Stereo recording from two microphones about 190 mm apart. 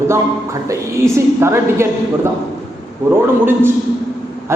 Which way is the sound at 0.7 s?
15° right (ahead or behind).